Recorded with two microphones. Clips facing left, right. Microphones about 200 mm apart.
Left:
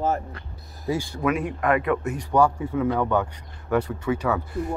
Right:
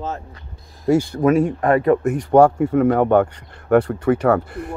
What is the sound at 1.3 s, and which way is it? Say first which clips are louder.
Speech: right 7 dB; 35° right (ahead or behind).